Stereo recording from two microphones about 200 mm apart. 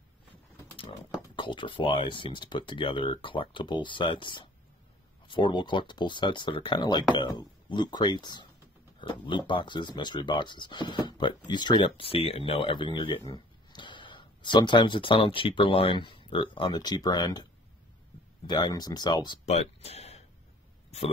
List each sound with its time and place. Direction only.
1.3 s speech: 25° left (ahead or behind)
18.5 s speech: 20° left (ahead or behind)
19.4 s a sound: 35° left (ahead or behind)